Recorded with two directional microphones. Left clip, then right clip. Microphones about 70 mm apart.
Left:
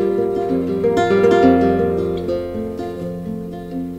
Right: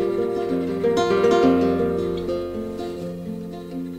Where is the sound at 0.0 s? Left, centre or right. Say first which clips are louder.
Left 4 dB; right.